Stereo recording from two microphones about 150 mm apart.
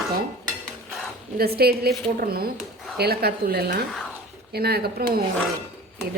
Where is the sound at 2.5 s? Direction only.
Centre (ahead or behind).